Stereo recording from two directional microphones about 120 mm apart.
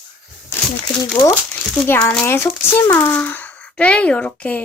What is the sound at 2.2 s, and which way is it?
Speech, 20° left (ahead or behind).